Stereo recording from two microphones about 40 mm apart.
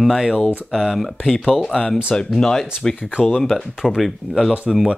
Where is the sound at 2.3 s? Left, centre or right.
Centre.